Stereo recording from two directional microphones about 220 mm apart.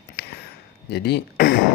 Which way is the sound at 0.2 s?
50° left (ahead or behind).